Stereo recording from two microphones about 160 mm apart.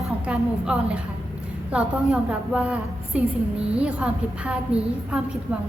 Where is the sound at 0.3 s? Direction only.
5° right (ahead or behind).